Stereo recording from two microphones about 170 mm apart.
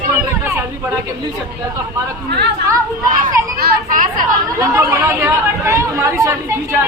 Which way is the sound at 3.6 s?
55° right (ahead or behind).